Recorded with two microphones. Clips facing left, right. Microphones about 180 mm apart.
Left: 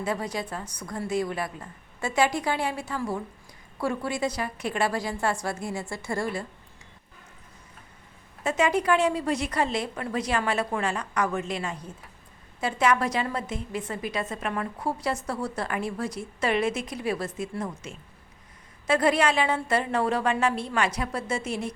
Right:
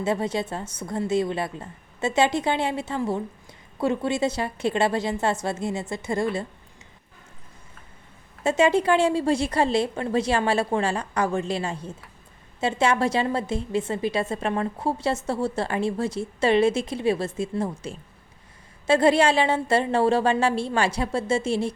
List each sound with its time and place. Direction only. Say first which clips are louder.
0.0 s a woman's voice: right 5 dB; 25° right (ahead or behind)
8.4 s a woman's voice: right 4 dB; 30° right (ahead or behind)